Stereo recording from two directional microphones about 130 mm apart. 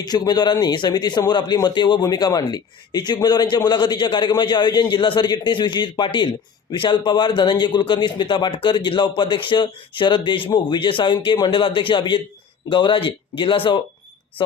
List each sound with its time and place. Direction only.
0.0 s speech: 30° left (ahead or behind)